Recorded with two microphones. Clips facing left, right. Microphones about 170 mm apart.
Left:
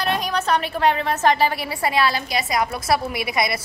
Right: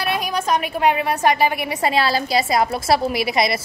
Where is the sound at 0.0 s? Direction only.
10° right (ahead or behind).